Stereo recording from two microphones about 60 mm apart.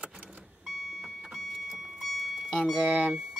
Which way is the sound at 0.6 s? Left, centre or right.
Centre.